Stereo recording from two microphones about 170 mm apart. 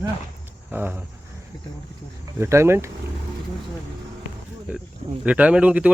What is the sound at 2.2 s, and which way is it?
Speech, 15° right (ahead or behind).